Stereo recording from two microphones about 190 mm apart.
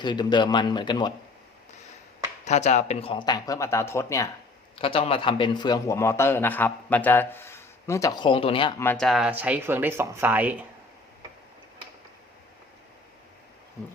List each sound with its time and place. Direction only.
0.0 s speech: 25° left (ahead or behind)
2.4 s speech: 35° left (ahead or behind); by 4.3 s 15° left (ahead or behind)
4.8 s a man's voice: 30° left (ahead or behind)
8.8 s speech: 5° left (ahead or behind); by 10.6 s 10° right (ahead or behind)